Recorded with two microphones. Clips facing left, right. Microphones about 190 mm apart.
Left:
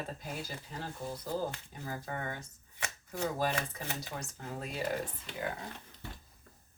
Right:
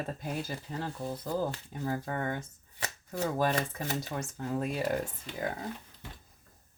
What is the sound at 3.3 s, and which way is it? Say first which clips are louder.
Speech: right 4 dB; 45° right (ahead or behind).